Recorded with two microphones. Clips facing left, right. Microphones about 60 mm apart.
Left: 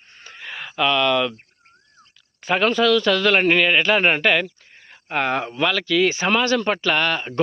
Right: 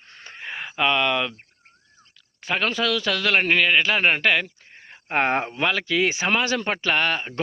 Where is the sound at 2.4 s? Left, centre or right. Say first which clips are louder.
Left 6 dB; centre.